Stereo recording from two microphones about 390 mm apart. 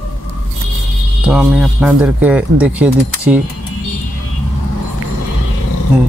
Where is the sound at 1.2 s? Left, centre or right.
Centre.